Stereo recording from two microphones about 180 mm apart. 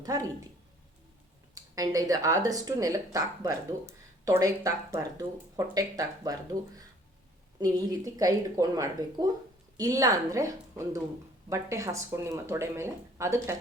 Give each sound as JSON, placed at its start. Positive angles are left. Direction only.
{"t": 0.0, "sound": "speech", "side_deg": -20}
{"t": 1.5, "sound": "speech", "side_deg": -20}